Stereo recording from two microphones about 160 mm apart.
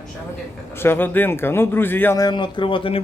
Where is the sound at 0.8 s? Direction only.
15° left (ahead or behind).